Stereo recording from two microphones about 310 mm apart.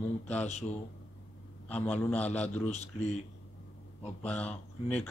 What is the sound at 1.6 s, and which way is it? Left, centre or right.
Speech, centre.